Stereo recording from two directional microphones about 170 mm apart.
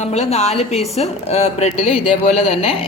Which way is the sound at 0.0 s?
40° left (ahead or behind).